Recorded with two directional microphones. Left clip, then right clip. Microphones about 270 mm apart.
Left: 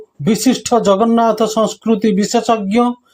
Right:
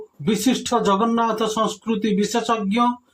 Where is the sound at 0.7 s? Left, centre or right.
Left.